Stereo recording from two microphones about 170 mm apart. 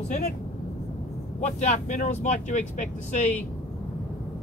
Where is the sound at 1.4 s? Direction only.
45° left (ahead or behind).